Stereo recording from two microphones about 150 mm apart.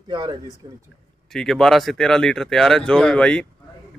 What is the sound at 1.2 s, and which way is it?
Speech, 5° left (ahead or behind).